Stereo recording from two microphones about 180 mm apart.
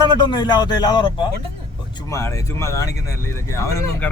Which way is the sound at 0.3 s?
25° left (ahead or behind).